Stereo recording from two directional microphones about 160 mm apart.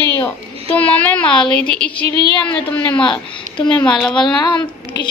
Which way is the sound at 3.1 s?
30° left (ahead or behind).